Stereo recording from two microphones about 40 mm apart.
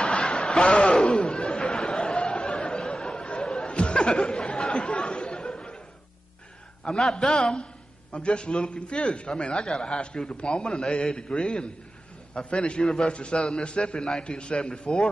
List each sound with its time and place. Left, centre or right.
0.0 s a sound: left
2.9 s chatter: left
7.0 s a man's voice: centre
8.1 s a man's voice: left